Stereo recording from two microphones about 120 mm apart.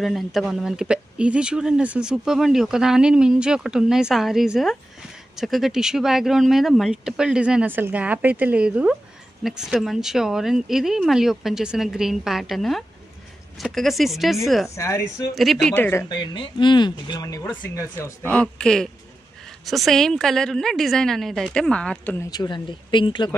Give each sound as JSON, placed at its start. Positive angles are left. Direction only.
{"t": 0.0, "sound": "speech", "side_deg": 0}
{"t": 14.8, "sound": "speech", "side_deg": 25}
{"t": 15.3, "sound": "speech", "side_deg": 0}
{"t": 15.7, "sound": "speech", "side_deg": 20}
{"t": 16.1, "sound": "speech", "side_deg": 40}
{"t": 18.3, "sound": "speech", "side_deg": 5}
{"t": 22.3, "sound": "speech", "side_deg": 35}